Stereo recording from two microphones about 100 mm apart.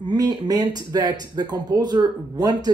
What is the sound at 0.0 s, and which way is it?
Speech, 45° right (ahead or behind).